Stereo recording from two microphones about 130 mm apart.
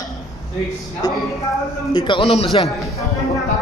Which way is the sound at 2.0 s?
40° left (ahead or behind).